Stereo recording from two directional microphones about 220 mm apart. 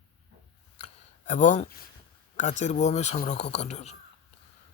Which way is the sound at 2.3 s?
35° left (ahead or behind).